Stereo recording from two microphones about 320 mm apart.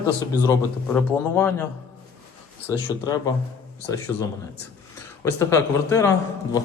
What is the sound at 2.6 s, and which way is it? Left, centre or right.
Speech, centre.